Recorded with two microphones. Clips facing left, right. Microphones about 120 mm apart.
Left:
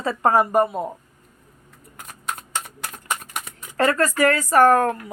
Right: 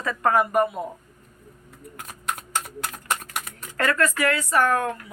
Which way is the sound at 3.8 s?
35° left (ahead or behind).